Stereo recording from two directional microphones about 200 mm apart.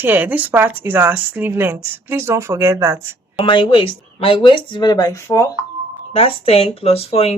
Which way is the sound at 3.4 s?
25° left (ahead or behind).